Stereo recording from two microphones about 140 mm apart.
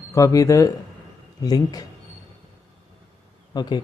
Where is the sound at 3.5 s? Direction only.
30° left (ahead or behind).